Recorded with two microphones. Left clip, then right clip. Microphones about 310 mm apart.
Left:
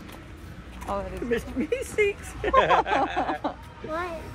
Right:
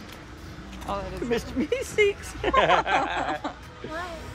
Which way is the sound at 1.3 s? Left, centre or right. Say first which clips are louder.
Right 1 dB; right.